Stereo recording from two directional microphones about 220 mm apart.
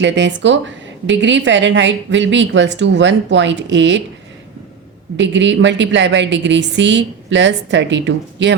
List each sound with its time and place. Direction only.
0.0 s a woman's voice: 55° right (ahead or behind)
5.1 s a woman's voice: 55° right (ahead or behind)